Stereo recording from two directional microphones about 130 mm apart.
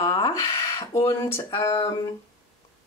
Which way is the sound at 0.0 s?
30° left (ahead or behind).